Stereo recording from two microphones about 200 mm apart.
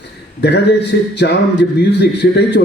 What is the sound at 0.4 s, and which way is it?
Speech, 60° left (ahead or behind).